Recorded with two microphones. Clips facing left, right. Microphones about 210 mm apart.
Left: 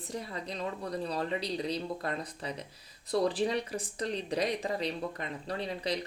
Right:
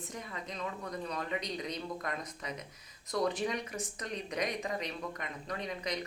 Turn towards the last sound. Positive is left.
turn(degrees=30)  # may be behind; listen again after turning